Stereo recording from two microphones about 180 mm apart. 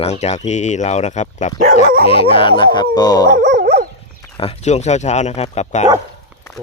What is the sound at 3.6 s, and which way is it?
Dog, 65° right (ahead or behind).